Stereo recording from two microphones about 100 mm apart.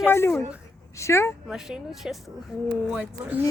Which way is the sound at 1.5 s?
5° right (ahead or behind).